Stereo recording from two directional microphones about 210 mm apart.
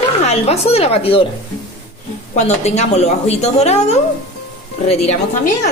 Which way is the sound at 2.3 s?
30° left (ahead or behind).